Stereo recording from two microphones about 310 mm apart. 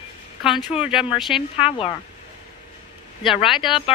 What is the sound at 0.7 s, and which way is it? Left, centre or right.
Speech, centre.